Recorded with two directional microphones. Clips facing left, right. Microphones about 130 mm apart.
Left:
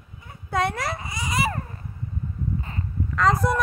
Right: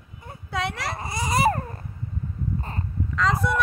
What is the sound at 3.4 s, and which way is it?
Speech, 40° left (ahead or behind).